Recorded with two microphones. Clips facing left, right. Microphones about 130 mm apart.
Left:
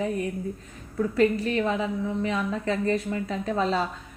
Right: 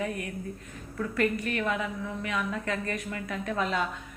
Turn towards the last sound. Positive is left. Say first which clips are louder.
# left 4 dB
turn(degrees=30)  # may be behind; listen again after turning